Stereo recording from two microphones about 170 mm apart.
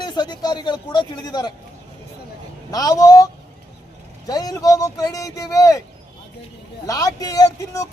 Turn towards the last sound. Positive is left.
turn(degrees=20)  # may be behind; listen again after turning